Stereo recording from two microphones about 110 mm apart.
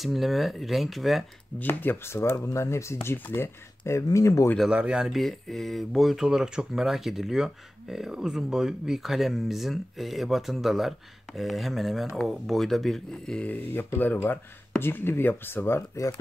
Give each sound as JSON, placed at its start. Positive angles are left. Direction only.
{"t": 0.0, "sound": "speech", "side_deg": 0}
{"t": 1.6, "sound": "speech", "side_deg": 20}
{"t": 4.6, "sound": "speech", "side_deg": -10}